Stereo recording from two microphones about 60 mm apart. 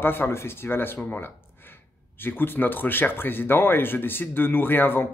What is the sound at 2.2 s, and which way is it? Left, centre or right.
Speech, left.